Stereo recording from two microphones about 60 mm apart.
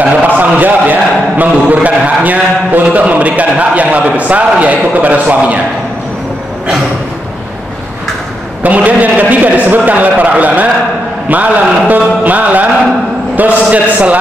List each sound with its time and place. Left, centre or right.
0.0 s a sound: right
1.7 s a man's voice: right
8.6 s a man's voice: right